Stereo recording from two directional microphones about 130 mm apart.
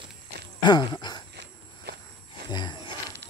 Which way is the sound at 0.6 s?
35° left (ahead or behind).